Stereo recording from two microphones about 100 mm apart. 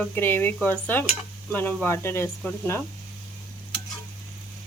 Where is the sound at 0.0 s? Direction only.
20° left (ahead or behind).